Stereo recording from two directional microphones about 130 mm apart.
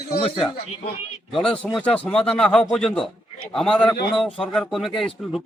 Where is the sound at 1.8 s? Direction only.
10° left (ahead or behind).